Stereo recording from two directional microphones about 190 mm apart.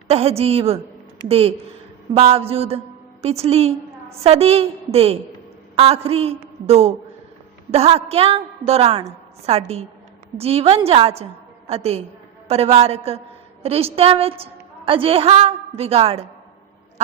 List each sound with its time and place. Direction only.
0.1 s a woman's voice: 35° right (ahead or behind)